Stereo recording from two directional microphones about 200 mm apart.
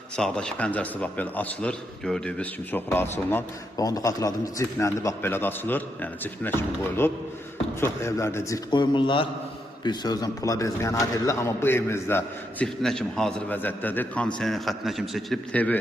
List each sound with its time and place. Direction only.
0.2 s a man's voice: 5° left (ahead or behind)